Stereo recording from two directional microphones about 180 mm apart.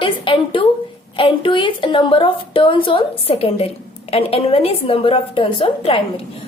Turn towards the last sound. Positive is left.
turn(degrees=30)  # may be behind; listen again after turning